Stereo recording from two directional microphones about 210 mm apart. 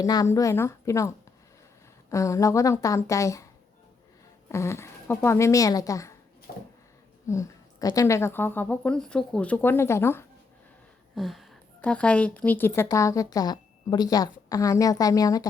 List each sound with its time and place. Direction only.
0.0 s a woman's voice: 15° left (ahead or behind)
4.4 s speech: 15° left (ahead or behind)
7.3 s a woman's voice: 15° left (ahead or behind)
11.1 s a woman's voice: centre (ahead or behind); by 15.4 s 15° left (ahead or behind)